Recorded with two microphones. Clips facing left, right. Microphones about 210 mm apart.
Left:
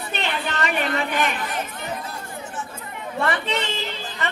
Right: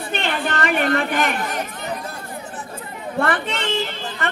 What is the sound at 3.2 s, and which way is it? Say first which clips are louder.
Speech: right 1 dB; 50° right (ahead or behind).